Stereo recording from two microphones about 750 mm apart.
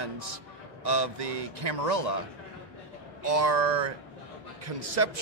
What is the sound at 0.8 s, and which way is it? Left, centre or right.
A man's voice, right.